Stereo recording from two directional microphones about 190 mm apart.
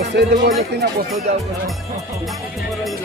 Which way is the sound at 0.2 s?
60° right (ahead or behind).